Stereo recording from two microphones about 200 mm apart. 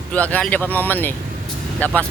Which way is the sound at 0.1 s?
10° left (ahead or behind).